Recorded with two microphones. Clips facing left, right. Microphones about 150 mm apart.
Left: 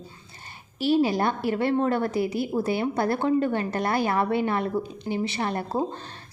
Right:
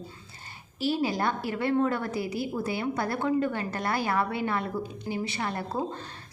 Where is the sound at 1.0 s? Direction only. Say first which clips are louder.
Left 4 dB; 25° left (ahead or behind).